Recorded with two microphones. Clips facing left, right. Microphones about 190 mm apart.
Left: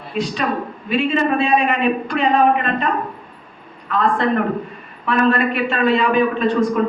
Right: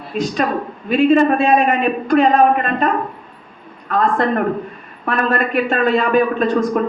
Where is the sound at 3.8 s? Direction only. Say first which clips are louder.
Right 1 dB; 45° right (ahead or behind).